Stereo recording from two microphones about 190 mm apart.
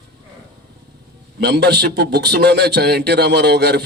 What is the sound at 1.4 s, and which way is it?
A man's voice, 60° right (ahead or behind).